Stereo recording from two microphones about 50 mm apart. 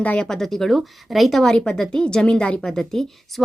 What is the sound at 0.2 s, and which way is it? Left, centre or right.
A woman's voice, centre.